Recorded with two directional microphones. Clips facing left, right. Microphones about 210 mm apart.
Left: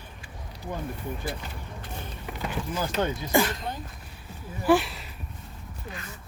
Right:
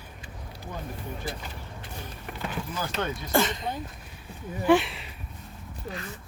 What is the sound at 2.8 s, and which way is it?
Speech, 30° left (ahead or behind).